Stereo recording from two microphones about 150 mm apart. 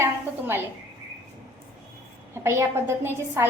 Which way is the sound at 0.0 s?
15° right (ahead or behind).